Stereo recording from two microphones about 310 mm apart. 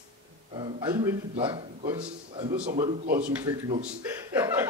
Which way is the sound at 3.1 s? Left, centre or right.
Centre.